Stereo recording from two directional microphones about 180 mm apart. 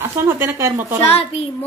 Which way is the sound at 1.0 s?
35° left (ahead or behind).